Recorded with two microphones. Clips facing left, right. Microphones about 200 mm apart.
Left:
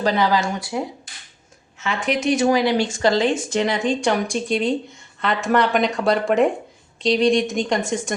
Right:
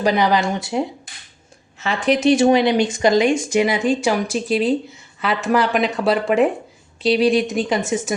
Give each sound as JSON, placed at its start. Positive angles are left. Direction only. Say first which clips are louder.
{"t": 0.0, "sound": "speech", "louder": "right 2 dB", "side_deg": -15}
{"t": 1.8, "sound": "speech", "louder": "right 5 dB", "side_deg": -35}